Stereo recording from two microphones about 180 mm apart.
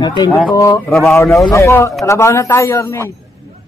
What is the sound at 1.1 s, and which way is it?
A man's voice, 15° left (ahead or behind).